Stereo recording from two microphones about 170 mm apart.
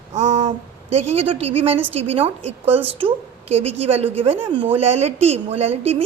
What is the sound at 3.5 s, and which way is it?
A woman's voice, 35° right (ahead or behind).